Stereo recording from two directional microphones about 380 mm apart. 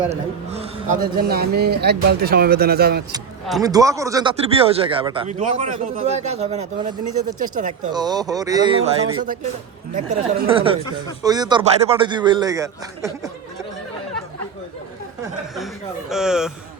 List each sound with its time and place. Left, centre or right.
1.0 s speech: right
3.4 s speech: centre
16.0 s speech: centre